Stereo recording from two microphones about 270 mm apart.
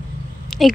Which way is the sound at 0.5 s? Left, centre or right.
Centre.